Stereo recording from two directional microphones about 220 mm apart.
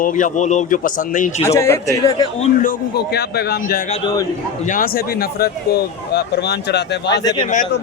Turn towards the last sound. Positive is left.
turn(degrees=20)  # may be behind; listen again after turning